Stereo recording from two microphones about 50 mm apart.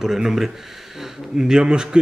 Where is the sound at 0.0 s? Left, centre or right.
Centre.